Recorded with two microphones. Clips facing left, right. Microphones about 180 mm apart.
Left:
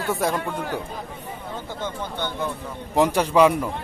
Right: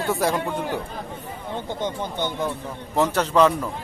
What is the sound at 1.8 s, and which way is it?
Speech, 15° right (ahead or behind).